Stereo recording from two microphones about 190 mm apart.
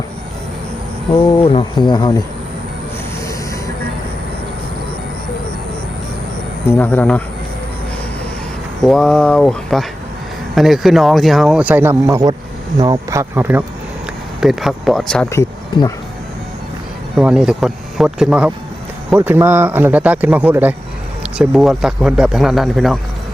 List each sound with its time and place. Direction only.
1.4 s speech: 30° left (ahead or behind)
6.7 s speech: 10° left (ahead or behind)
8.8 s speech: centre (ahead or behind)
15.3 s speech: 20° left (ahead or behind)
17.2 s speech: 5° right (ahead or behind)